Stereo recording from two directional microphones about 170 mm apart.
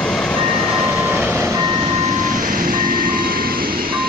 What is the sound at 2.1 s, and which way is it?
Vehicle, 50° right (ahead or behind).